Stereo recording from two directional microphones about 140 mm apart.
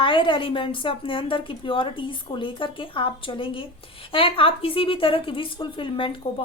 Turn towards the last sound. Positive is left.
turn(degrees=35)  # may be behind; listen again after turning